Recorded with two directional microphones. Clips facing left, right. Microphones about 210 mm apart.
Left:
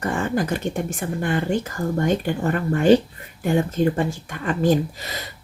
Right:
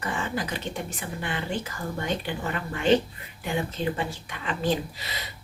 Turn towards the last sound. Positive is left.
turn(degrees=45)  # may be behind; listen again after turning